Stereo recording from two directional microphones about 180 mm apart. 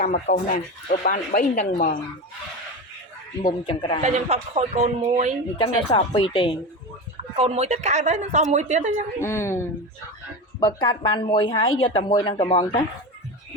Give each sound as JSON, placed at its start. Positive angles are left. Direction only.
{"t": 0.0, "sound": "speech", "side_deg": 45}
{"t": 3.4, "sound": "speech", "side_deg": 25}
{"t": 4.0, "sound": "a woman's voice", "side_deg": -35}
{"t": 5.5, "sound": "speech", "side_deg": 30}
{"t": 7.3, "sound": "a woman's voice", "side_deg": -35}
{"t": 9.1, "sound": "a woman's voice", "side_deg": 15}